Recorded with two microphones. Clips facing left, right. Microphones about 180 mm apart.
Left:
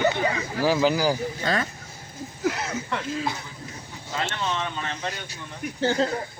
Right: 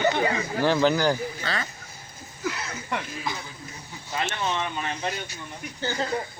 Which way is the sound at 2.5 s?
75° left (ahead or behind).